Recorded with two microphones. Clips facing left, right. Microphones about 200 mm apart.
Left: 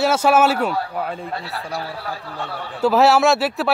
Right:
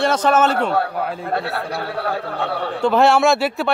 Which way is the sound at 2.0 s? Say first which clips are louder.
Right 7 dB; 60° right (ahead or behind).